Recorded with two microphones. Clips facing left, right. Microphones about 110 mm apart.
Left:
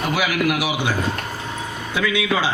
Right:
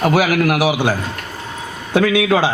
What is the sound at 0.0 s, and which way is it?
A man's voice, 45° right (ahead or behind).